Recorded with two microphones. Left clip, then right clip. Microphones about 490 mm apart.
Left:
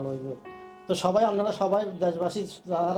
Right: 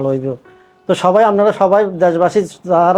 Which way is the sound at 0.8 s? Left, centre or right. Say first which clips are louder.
Right 13 dB; right.